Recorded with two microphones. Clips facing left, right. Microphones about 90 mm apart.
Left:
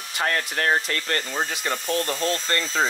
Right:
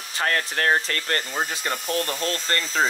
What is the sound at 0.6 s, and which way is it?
Speech, 45° right (ahead or behind).